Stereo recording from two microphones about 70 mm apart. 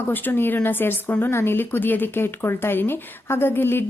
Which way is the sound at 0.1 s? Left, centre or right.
Left.